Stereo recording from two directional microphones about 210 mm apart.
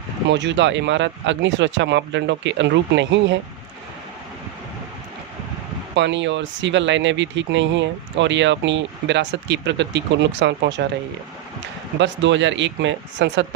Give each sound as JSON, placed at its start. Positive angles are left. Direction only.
{"t": 0.3, "sound": "speech", "side_deg": -60}
{"t": 5.9, "sound": "speech", "side_deg": -60}
{"t": 11.9, "sound": "speech", "side_deg": -60}